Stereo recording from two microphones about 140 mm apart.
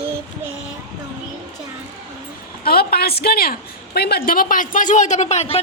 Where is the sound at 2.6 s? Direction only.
90° left.